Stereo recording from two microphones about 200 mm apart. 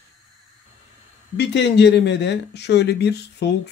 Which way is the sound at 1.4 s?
60° left (ahead or behind).